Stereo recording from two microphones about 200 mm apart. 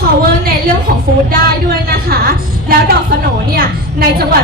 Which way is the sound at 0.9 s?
45° right (ahead or behind).